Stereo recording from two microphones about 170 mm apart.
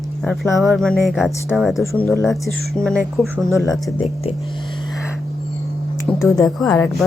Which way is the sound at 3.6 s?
20° left (ahead or behind).